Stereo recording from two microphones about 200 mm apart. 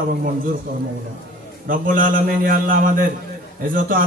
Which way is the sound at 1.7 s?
45° right (ahead or behind).